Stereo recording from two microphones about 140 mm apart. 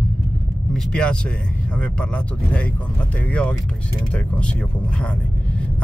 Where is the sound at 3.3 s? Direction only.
10° left (ahead or behind).